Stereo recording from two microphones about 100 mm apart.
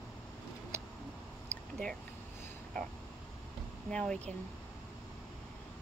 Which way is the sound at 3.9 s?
10° left (ahead or behind).